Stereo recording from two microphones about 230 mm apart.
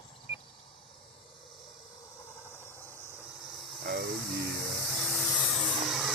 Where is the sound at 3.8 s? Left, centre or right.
Right.